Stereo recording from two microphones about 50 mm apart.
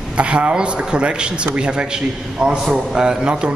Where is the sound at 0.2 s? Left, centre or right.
Right.